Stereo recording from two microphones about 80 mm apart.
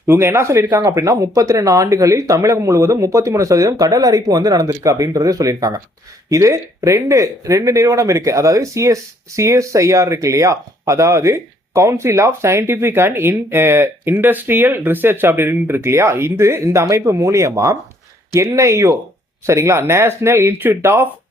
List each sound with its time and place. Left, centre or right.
0.1 s speech: right